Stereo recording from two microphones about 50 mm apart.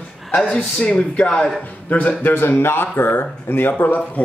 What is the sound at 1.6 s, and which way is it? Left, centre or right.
A man's voice, left.